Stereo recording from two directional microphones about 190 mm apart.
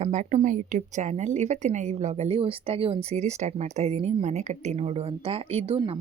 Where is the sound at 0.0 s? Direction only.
40° right (ahead or behind).